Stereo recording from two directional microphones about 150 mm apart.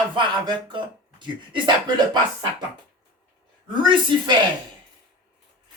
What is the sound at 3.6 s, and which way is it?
Speech, 30° right (ahead or behind).